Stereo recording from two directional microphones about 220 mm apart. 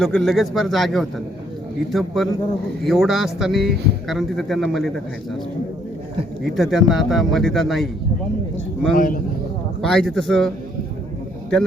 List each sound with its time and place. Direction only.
0.0 s speech: centre (ahead or behind)
6.4 s speech: centre (ahead or behind)
9.0 s a man's voice: 40° left (ahead or behind)
9.8 s speech: centre (ahead or behind)